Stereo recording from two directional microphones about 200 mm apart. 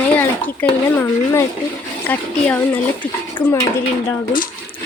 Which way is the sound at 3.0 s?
10° left (ahead or behind).